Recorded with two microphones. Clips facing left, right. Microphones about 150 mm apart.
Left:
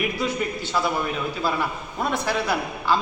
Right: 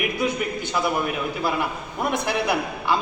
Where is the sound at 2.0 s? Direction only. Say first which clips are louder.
Right 1 dB; 15° right (ahead or behind).